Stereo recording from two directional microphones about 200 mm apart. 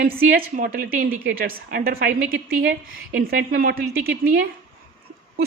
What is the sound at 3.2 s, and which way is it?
Speech, 45° right (ahead or behind).